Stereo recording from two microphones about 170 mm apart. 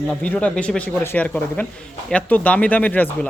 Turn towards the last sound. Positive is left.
turn(degrees=10)  # may be behind; listen again after turning